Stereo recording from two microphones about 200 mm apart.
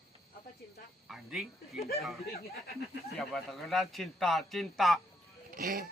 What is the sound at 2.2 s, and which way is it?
Speech, 50° left (ahead or behind).